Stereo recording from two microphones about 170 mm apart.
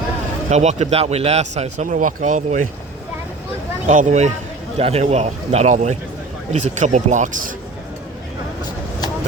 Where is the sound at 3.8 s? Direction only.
50° right (ahead or behind).